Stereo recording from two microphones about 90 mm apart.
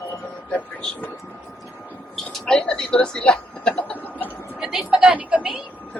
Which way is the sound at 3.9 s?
20° left (ahead or behind).